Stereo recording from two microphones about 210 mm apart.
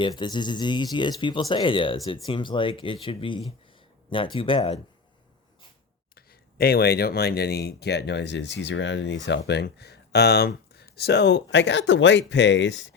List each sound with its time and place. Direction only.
0.0 s speech: 20° left (ahead or behind)
6.1 s speech: 45° left (ahead or behind)